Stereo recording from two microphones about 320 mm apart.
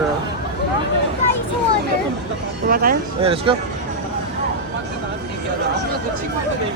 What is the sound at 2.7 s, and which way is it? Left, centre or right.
Speech, right.